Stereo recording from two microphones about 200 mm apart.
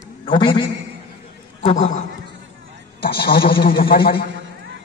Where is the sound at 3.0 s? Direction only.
50° left (ahead or behind).